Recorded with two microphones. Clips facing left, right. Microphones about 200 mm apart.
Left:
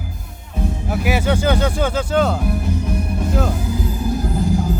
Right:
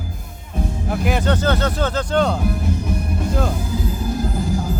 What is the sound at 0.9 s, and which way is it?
Speech, 5° left (ahead or behind).